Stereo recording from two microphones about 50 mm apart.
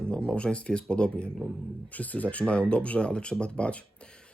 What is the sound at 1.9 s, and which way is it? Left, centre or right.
Speech, left.